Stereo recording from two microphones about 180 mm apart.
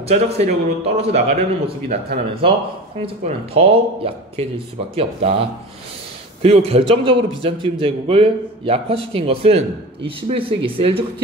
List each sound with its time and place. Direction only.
0.1 s a man's voice: 35° right (ahead or behind)